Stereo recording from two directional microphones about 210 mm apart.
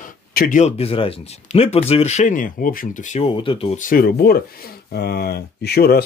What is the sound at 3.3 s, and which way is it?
Speech, 25° left (ahead or behind).